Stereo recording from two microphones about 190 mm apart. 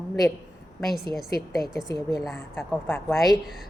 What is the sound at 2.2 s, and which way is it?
A woman's voice, centre (ahead or behind).